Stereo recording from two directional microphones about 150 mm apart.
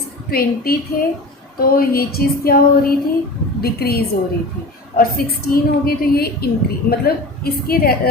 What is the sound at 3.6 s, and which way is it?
A woman's voice, 90° left.